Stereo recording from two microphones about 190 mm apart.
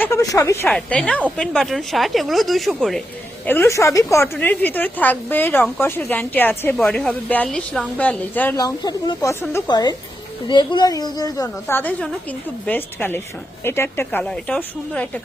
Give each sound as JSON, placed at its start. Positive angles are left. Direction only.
{"t": 0.0, "sound": "a woman's voice", "side_deg": 15}
{"t": 3.4, "sound": "a woman's voice", "side_deg": 10}